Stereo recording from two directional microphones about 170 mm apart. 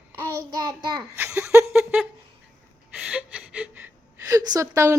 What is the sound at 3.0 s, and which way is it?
A woman's voice, 10° right (ahead or behind).